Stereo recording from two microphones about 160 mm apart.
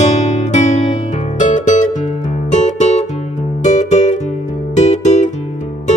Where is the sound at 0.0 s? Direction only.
45° left (ahead or behind).